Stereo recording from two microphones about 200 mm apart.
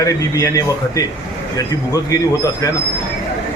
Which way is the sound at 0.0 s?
15° left (ahead or behind).